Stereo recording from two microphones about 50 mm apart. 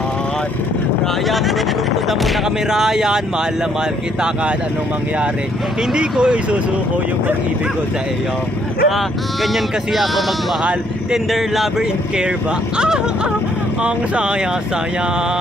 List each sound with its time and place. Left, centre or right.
2.0 s speech: centre
5.9 s speech: centre
8.8 s speech: centre
10.6 s speech: centre
11.3 s speech: centre
12.7 s speech: centre